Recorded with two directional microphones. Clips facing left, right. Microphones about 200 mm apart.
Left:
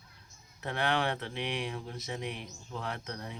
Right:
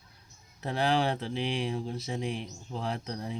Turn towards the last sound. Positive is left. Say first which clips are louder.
# right 5 dB
turn(degrees=-30)  # may be behind; listen again after turning